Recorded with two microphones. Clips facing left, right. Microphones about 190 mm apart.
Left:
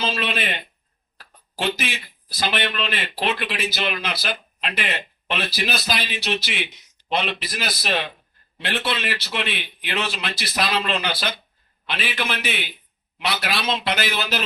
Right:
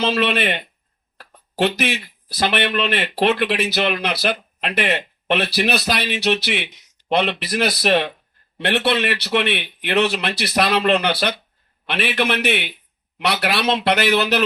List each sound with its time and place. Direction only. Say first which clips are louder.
0.0 s speech: right 6 dB; 65° right (ahead or behind)